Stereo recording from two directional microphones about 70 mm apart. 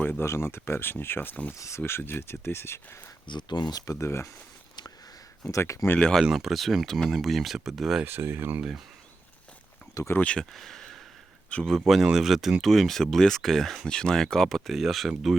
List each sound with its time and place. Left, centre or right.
0.0 s speech: left
1.5 s speech: left
1.8 s speech: left
3.2 s speech: left
3.9 s speech: left
5.4 s speech: left
6.2 s speech: centre
8.0 s speech: right
10.2 s speech: centre
10.5 s speech: centre
11.5 s speech: centre
11.9 s speech: centre